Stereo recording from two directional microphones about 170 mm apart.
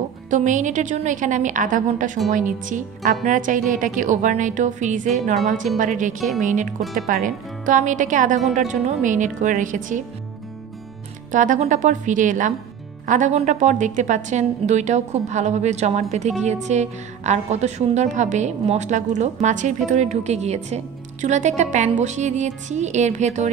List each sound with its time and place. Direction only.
0.3 s a woman's voice: 45° right (ahead or behind)
11.3 s a woman's voice: 45° right (ahead or behind)